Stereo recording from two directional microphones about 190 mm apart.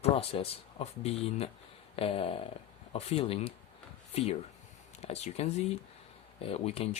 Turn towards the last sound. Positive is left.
turn(degrees=30)  # may be behind; listen again after turning